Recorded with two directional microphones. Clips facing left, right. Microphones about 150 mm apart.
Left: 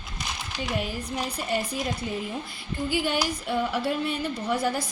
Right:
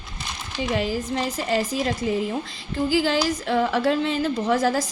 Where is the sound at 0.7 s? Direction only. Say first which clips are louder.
Right 6 dB; 90° right.